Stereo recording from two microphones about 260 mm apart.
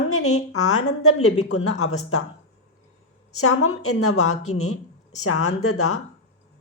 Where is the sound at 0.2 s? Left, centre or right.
Left.